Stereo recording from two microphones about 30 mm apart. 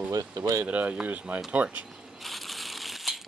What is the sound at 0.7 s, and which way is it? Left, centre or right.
Speech, right.